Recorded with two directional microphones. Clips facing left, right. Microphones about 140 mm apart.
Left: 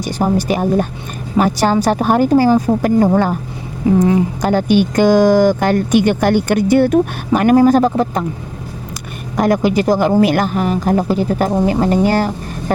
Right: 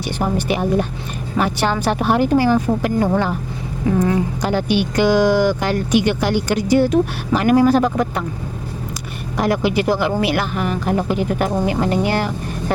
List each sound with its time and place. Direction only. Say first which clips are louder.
0.2 s speech: left 4 dB; 40° left (ahead or behind)
4.4 s speech: left 6 dB; 45° left (ahead or behind)
9.4 s speech: left 4 dB; 45° left (ahead or behind)